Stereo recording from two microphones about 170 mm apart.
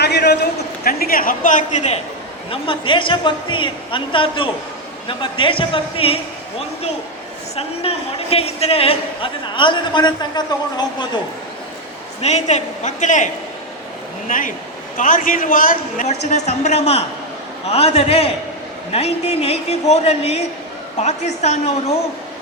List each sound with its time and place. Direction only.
0.0 s a man's voice: 75° left (ahead or behind)
0.9 s a man's voice: 60° left (ahead or behind)
2.5 s a woman's voice: 30° left (ahead or behind)
7.5 s a woman's voice: 35° left (ahead or behind)
12.2 s a man's voice: 40° left (ahead or behind)
16.3 s a man's voice: 40° left (ahead or behind)